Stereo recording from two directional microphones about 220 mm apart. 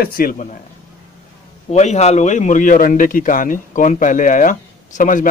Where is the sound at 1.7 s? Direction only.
30° left (ahead or behind).